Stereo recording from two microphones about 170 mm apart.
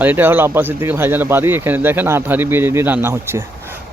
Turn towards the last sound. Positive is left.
turn(degrees=-15)  # may be behind; listen again after turning